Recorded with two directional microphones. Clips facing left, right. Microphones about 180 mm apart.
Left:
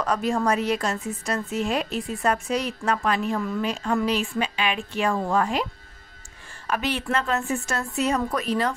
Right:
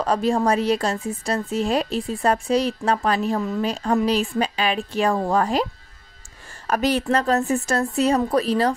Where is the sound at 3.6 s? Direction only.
35° right (ahead or behind).